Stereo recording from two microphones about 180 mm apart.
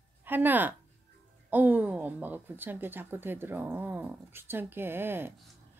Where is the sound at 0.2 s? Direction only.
10° right (ahead or behind).